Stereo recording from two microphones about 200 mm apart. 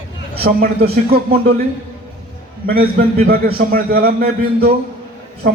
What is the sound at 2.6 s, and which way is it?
Speech, 50° right (ahead or behind).